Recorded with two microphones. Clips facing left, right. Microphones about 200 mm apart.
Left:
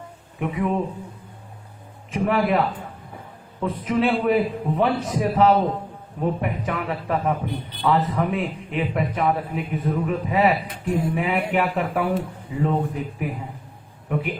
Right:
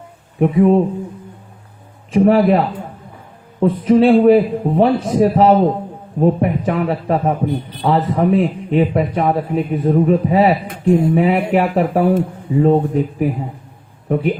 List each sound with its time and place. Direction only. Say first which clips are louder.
0.3 s a man's voice: right 12 dB; 35° right (ahead or behind)
2.1 s a man's voice: right 9 dB; 35° right (ahead or behind)
11.1 s a man's voice: right 8 dB; 35° right (ahead or behind)